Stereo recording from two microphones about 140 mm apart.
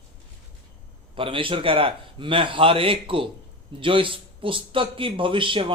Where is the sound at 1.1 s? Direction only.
40° right (ahead or behind).